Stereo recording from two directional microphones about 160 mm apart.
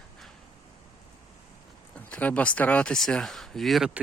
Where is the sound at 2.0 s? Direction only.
10° left (ahead or behind).